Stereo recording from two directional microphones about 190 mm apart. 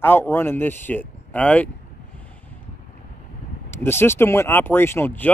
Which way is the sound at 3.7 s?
10° left (ahead or behind).